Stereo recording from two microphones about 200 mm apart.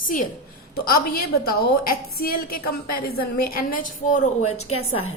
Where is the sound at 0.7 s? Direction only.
50° left (ahead or behind); by 4.7 s 35° left (ahead or behind).